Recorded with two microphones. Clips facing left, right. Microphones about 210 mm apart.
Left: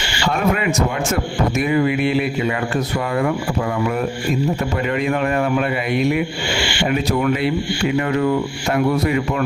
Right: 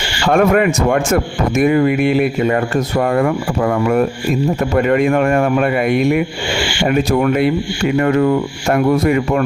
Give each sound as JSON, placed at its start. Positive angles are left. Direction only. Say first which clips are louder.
{"t": 0.3, "sound": "a man's voice", "louder": "right 7 dB", "side_deg": -55}